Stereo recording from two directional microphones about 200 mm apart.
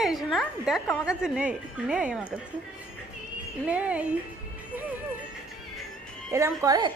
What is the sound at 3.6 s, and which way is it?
Speech, 5° right (ahead or behind).